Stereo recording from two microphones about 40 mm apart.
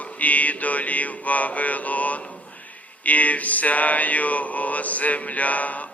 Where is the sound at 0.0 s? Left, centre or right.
Left.